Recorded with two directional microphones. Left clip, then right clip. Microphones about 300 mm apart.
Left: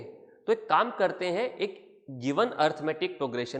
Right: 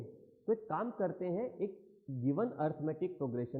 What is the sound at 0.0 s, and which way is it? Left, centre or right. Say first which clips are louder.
A woman's voice: left 7 dB; centre.